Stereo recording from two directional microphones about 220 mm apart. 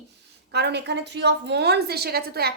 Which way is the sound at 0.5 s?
50° right (ahead or behind).